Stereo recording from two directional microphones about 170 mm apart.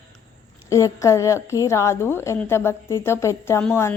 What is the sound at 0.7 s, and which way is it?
A woman's voice, 20° left (ahead or behind).